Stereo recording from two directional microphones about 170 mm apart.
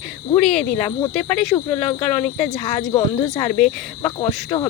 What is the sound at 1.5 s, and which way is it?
Cricket, 10° left (ahead or behind).